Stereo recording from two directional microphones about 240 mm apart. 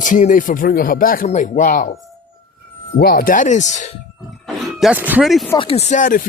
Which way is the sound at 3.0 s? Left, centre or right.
Left.